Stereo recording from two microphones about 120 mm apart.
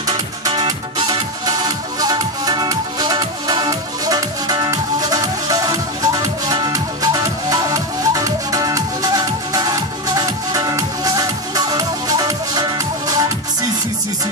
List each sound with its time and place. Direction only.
0.5 s music: 40° right (ahead or behind)